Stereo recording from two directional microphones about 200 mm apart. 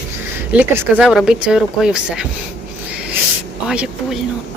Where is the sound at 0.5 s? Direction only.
10° right (ahead or behind).